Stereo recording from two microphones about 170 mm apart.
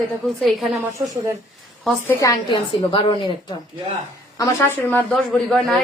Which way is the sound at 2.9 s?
30° left (ahead or behind).